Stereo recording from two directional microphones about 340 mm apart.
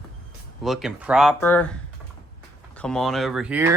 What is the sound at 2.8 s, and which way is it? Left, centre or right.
Speech, centre.